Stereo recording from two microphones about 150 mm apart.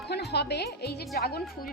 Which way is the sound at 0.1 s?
90° left.